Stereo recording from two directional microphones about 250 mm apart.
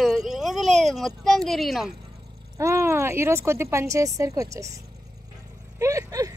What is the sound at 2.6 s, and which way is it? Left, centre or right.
Speech, centre.